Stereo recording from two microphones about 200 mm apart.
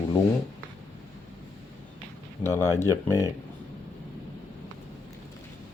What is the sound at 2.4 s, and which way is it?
Speech, 15° left (ahead or behind).